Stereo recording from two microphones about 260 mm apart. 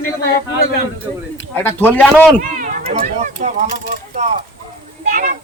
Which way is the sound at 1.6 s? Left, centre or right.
Centre.